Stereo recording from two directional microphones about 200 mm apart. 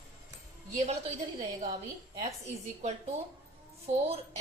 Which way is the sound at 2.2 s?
15° right (ahead or behind).